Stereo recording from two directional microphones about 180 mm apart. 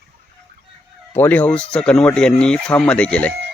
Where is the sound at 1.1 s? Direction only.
10° left (ahead or behind).